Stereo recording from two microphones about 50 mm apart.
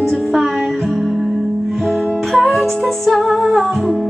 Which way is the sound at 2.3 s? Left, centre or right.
Centre.